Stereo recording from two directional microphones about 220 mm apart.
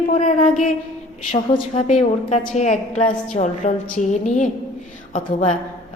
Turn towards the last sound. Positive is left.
turn(degrees=35)  # may be behind; listen again after turning